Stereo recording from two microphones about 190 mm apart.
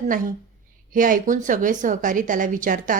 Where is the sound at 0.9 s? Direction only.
45° right (ahead or behind).